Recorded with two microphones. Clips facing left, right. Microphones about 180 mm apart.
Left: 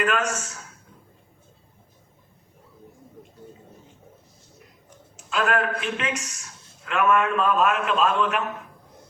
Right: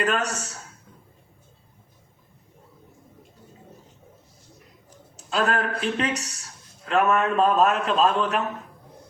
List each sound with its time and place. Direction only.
0.0 s speech: 35° right (ahead or behind)
4.9 s speech: 35° right (ahead or behind)